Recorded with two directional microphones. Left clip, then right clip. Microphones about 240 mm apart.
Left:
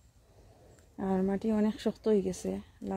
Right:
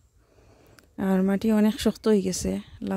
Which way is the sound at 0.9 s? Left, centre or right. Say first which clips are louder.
Right 6 dB; right.